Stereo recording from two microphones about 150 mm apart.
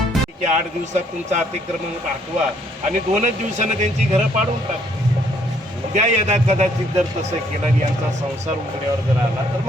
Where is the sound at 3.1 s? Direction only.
50° right (ahead or behind).